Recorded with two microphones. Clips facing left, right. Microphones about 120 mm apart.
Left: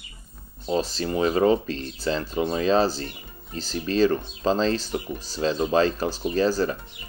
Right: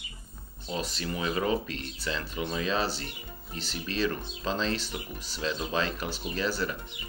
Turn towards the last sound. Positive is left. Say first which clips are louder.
# left 8 dB
turn(degrees=35)  # may be behind; listen again after turning